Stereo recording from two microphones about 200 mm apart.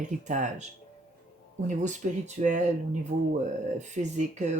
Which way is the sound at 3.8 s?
35° right (ahead or behind).